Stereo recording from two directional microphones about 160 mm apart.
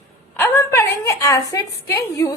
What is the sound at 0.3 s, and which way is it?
A woman's voice, 15° left (ahead or behind).